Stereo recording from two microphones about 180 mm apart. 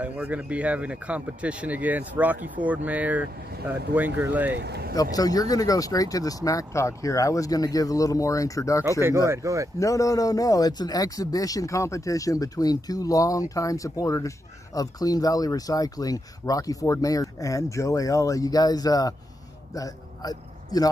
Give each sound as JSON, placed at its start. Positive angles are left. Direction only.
{"t": 0.0, "sound": "speech", "side_deg": -10}
{"t": 4.6, "sound": "speech", "side_deg": -65}
{"t": 4.9, "sound": "speech", "side_deg": 20}
{"t": 9.0, "sound": "speech", "side_deg": -15}
{"t": 9.8, "sound": "a man's voice", "side_deg": 20}